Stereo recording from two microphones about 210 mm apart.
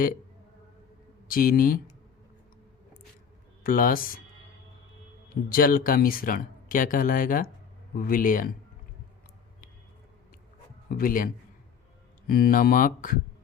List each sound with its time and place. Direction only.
1.3 s speech: 40° left (ahead or behind)
3.6 s speech: 40° left (ahead or behind)
5.5 s speech: 45° left (ahead or behind)
10.8 s a man's voice: 45° left (ahead or behind)
12.3 s speech: 45° left (ahead or behind)